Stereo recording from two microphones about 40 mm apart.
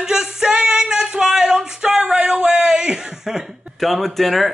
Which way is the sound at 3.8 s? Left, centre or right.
Centre.